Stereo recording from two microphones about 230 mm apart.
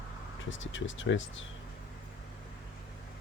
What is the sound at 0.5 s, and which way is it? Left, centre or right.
Speech, left.